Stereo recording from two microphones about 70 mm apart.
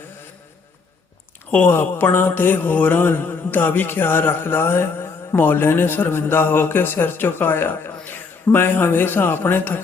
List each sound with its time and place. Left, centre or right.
1.5 s speech: left